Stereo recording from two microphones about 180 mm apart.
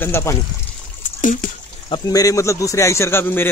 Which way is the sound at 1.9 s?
20° left (ahead or behind).